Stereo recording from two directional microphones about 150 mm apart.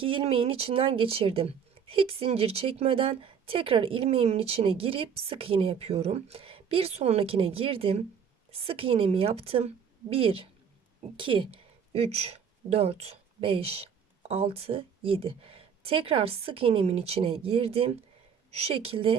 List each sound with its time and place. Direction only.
0.0 s a woman's voice: 40° right (ahead or behind)